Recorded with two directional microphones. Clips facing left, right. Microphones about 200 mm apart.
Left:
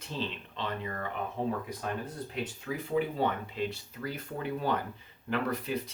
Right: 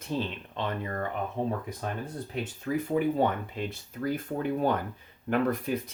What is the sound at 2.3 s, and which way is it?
Speech, 50° right (ahead or behind).